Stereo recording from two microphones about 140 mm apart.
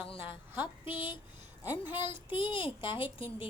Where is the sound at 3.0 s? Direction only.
40° left (ahead or behind).